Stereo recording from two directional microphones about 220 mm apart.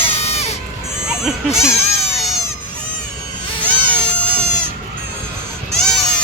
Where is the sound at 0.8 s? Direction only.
Centre (ahead or behind).